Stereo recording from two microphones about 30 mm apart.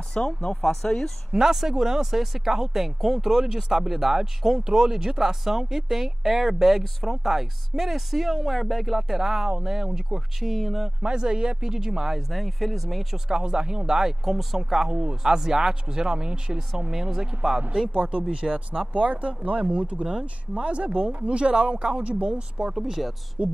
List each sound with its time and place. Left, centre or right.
0.1 s speech: left
1.3 s speech: centre
10.4 s speech: centre
11.0 s speech: right
12.3 s speech: centre
13.3 s speech: right
14.2 s speech: centre
14.6 s speech: centre
14.9 s speech: right
16.9 s speech: centre; by 22.8 s right
22.8 s speech: centre
23.4 s speech: right